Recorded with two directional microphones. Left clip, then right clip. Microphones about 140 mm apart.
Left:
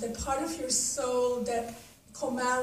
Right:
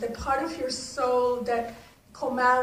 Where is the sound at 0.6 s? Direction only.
65° left (ahead or behind).